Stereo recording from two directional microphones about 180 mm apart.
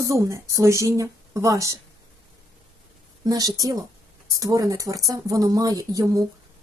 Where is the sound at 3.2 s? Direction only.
20° right (ahead or behind).